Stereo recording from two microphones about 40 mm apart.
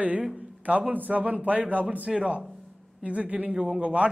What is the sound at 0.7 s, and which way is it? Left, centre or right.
A man's voice, right.